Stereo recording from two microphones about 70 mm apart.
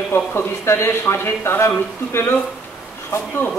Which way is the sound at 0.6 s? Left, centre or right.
Left.